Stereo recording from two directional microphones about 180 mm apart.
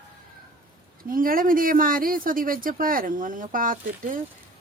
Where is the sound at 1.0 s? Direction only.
50° right (ahead or behind).